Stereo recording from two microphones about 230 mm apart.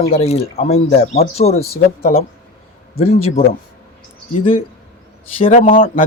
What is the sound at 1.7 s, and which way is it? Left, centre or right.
Speech, left.